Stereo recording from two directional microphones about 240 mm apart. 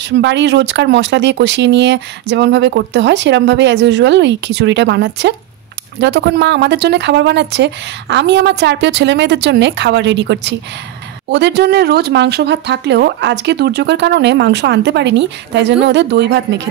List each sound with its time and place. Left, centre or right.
0.2 s speech: right